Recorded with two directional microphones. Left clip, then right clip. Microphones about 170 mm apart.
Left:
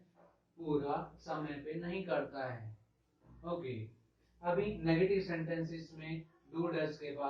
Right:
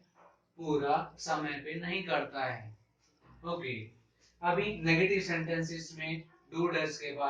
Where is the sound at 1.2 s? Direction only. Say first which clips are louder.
Right 7 dB; 15° right (ahead or behind).